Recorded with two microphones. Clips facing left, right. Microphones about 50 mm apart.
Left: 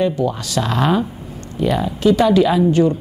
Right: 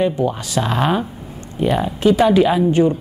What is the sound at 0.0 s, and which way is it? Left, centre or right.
A woman's voice, centre.